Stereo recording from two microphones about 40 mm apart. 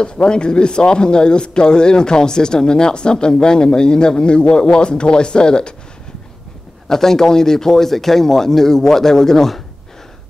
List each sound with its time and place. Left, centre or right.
0.0 s speech: left
6.9 s speech: centre